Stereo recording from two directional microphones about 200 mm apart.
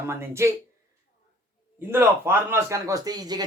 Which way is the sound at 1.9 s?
10° right (ahead or behind).